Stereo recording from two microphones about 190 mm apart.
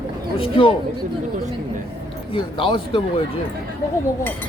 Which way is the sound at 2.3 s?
25° left (ahead or behind).